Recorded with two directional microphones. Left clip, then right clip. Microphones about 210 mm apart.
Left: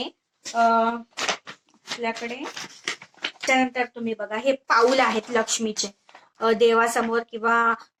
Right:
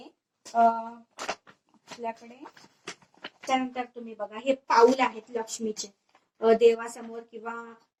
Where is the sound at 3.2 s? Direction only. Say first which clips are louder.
Left 7 dB; 15° left (ahead or behind).